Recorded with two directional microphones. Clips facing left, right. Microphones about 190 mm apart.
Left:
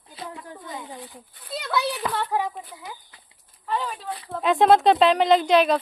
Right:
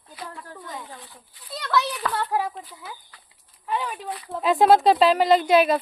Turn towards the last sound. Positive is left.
turn(degrees=-5)  # may be behind; listen again after turning